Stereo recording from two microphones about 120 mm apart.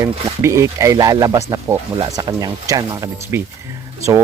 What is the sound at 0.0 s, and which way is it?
Speech, 25° right (ahead or behind).